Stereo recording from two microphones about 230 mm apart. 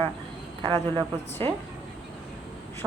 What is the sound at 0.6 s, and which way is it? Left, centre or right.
Speech, centre.